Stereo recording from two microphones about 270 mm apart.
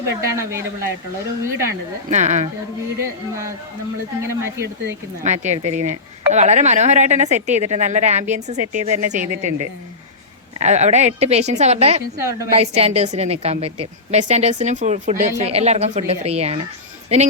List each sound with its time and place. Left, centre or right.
0.0 s speech: centre
2.0 s speech: right
3.0 s speech: centre
5.2 s speech: right
10.6 s speech: right
12.1 s speech: centre
12.5 s speech: right